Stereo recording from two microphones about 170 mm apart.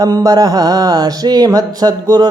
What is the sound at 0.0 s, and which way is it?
Speech, 20° right (ahead or behind).